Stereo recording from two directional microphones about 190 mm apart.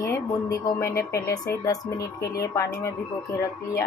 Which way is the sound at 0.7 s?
15° left (ahead or behind).